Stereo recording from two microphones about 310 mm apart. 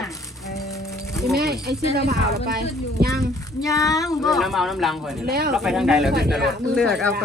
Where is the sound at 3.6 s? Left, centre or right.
Centre.